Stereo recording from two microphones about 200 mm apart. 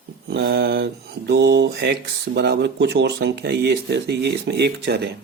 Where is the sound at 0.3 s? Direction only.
55° right (ahead or behind).